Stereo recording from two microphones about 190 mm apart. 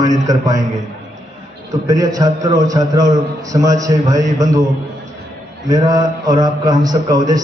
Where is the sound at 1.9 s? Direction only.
20° right (ahead or behind).